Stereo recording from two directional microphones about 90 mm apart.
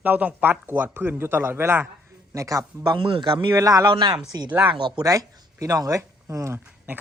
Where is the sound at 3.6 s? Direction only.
40° right (ahead or behind).